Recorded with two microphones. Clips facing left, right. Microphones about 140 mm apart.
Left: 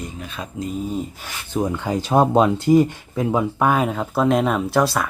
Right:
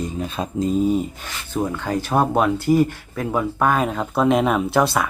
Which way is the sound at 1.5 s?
15° left (ahead or behind).